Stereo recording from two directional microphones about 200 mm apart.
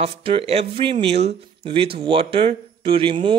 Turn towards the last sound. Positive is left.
turn(degrees=-25)  # may be behind; listen again after turning